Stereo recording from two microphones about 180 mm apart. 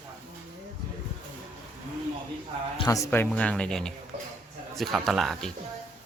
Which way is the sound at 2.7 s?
20° left (ahead or behind).